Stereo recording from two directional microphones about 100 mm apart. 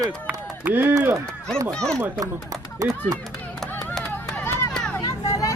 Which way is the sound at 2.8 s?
35° right (ahead or behind).